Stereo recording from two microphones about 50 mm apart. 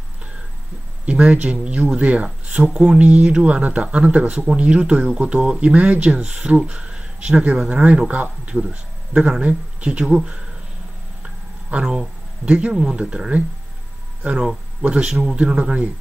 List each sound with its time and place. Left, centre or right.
1.0 s speech: right
8.6 s speech: centre
9.8 s speech: centre
11.9 s speech: centre
14.8 s speech: right